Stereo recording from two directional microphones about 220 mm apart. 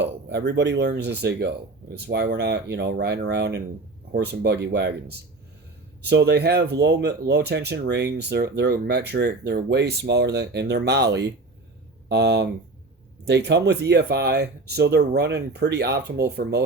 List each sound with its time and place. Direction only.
0.0 s speech: 50° right (ahead or behind)